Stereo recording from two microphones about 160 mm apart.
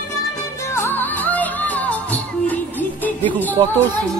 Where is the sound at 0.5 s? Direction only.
15° left (ahead or behind).